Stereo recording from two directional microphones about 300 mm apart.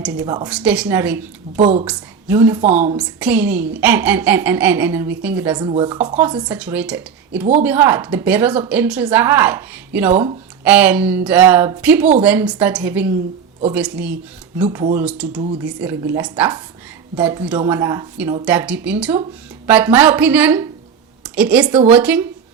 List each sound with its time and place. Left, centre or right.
0.2 s a woman's voice: centre
1.5 s a woman's voice: right
1.8 s a woman's voice: centre